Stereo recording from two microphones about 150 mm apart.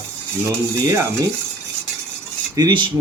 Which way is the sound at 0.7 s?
20° right (ahead or behind).